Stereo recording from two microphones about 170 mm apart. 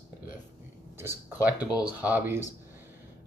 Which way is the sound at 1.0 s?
15° right (ahead or behind).